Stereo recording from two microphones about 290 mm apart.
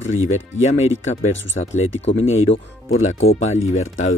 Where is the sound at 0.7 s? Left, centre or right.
Left.